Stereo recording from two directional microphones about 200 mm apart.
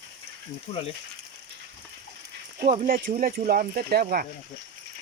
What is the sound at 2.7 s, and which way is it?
Speech, 40° right (ahead or behind).